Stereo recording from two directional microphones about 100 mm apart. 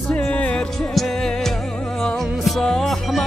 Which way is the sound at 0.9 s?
Centre (ahead or behind).